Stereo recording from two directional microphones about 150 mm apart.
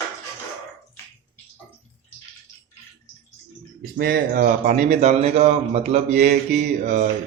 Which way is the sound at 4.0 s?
75° right (ahead or behind).